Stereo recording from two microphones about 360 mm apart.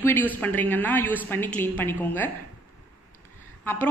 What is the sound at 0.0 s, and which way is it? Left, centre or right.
Speech, centre.